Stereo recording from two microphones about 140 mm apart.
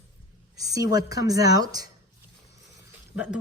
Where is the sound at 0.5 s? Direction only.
25° right (ahead or behind).